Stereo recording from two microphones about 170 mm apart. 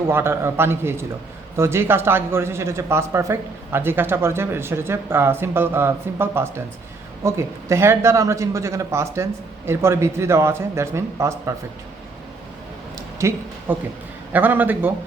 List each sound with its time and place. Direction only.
0.1 s speech: 15° right (ahead or behind)
13.0 s a sound: 15° right (ahead or behind)
14.3 s speech: 10° right (ahead or behind)